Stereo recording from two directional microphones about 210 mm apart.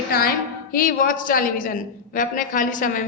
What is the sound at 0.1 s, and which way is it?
A woman's voice, 45° left (ahead or behind).